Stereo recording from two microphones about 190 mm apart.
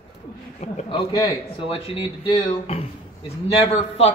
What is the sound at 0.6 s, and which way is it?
Speech, 35° left (ahead or behind).